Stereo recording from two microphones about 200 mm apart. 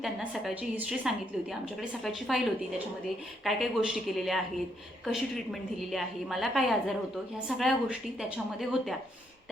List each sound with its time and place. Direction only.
0.0 s a woman's voice: centre (ahead or behind)